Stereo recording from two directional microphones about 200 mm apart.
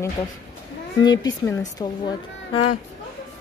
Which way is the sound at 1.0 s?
20° left (ahead or behind).